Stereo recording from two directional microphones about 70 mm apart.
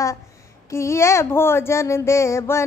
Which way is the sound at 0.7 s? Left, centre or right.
Left.